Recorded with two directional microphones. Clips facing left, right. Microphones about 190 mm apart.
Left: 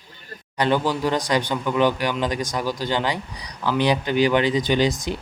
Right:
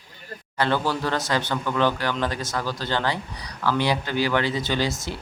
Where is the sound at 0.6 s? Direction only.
15° left (ahead or behind).